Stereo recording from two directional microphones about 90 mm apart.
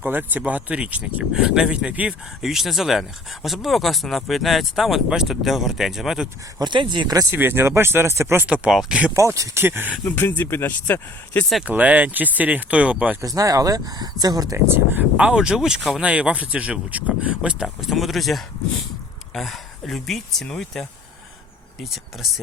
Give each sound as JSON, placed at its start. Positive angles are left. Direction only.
{"t": 0.0, "sound": "speech", "side_deg": -20}
{"t": 6.6, "sound": "speech", "side_deg": -60}
{"t": 7.3, "sound": "speech", "side_deg": -25}
{"t": 8.4, "sound": "speech", "side_deg": -15}
{"t": 9.1, "sound": "speech", "side_deg": -35}
{"t": 9.6, "sound": "speech", "side_deg": -25}
{"t": 10.1, "sound": "speech", "side_deg": 20}
{"t": 11.6, "sound": "speech", "side_deg": -15}
{"t": 13.2, "sound": "speech", "side_deg": -45}
{"t": 14.5, "sound": "speech", "side_deg": -25}
{"t": 15.2, "sound": "speech", "side_deg": -10}
{"t": 17.7, "sound": "speech", "side_deg": 0}